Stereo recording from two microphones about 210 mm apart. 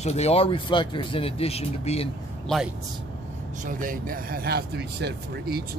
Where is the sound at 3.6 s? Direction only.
40° right (ahead or behind).